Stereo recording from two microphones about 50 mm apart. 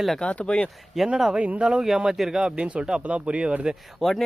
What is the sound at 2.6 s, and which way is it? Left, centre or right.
Speech, right.